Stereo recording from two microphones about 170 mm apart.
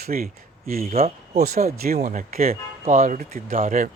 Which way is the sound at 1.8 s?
60° right (ahead or behind).